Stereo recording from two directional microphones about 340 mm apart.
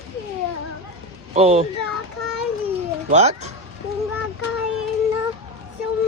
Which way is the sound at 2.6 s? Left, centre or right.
Centre.